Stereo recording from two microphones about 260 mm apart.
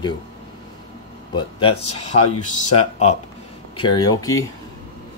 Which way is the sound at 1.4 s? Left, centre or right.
Centre.